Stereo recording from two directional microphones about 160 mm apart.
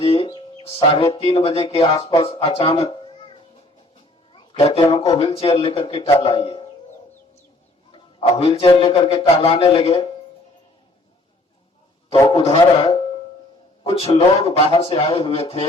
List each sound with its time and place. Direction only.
0.0 s speech: 35° left (ahead or behind)
2.8 s music: 35° left (ahead or behind)
4.3 s speech: 35° left (ahead or behind)
7.9 s a man's voice: 35° left (ahead or behind)
12.1 s a man's voice: 15° left (ahead or behind)
12.5 s speech: 30° left (ahead or behind)